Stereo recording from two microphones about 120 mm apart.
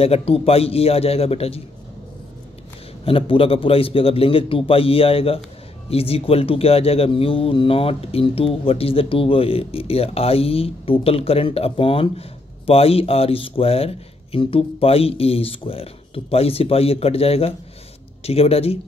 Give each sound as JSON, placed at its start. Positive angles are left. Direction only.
{"t": 0.0, "sound": "a man's voice", "side_deg": 55}
{"t": 3.1, "sound": "a man's voice", "side_deg": 50}